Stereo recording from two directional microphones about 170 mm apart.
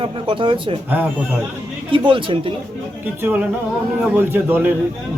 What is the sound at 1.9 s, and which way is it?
Speech, 30° right (ahead or behind).